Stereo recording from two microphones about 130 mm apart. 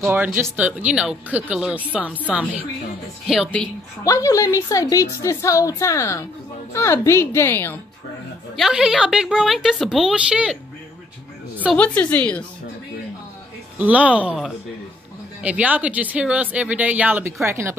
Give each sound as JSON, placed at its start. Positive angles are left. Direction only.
{"t": 0.0, "sound": "speech", "side_deg": -15}
{"t": 4.0, "sound": "a woman's voice", "side_deg": 25}
{"t": 8.5, "sound": "a woman's voice", "side_deg": -5}
{"t": 11.7, "sound": "a woman's voice", "side_deg": 10}
{"t": 13.7, "sound": "speech", "side_deg": -10}